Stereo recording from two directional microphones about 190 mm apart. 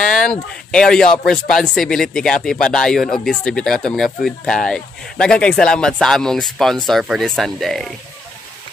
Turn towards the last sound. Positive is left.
turn(degrees=0)  # may be behind; listen again after turning